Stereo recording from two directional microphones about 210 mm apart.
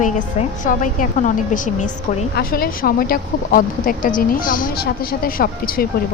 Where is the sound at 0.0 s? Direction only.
40° left (ahead or behind).